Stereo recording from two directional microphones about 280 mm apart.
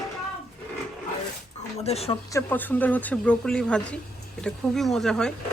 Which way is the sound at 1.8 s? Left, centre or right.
Left.